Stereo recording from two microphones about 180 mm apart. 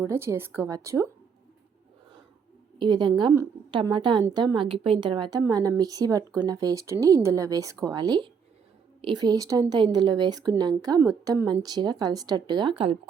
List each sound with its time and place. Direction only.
0.0 s a woman's voice: 15° right (ahead or behind)
2.7 s a woman's voice: 25° right (ahead or behind)